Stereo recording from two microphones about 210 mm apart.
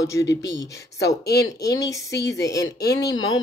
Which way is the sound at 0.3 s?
55° left (ahead or behind).